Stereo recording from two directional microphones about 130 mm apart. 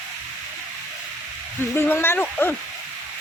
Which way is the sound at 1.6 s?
15° left (ahead or behind).